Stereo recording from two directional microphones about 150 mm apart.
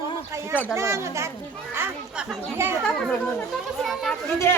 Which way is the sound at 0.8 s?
20° right (ahead or behind).